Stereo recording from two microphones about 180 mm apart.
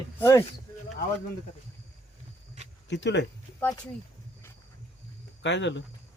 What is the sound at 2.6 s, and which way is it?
Cricket, 40° right (ahead or behind).